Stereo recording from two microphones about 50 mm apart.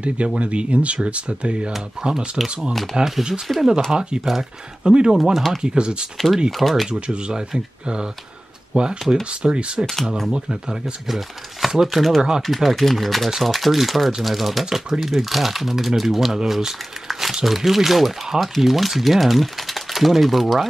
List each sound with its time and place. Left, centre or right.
0.4 s speech: right
2.7 s speech: centre
4.2 s speech: centre
4.8 s speech: centre
5.1 s speech: centre
5.6 s speech: centre
6.1 s speech: centre
6.9 s speech: centre
9.8 s speech: centre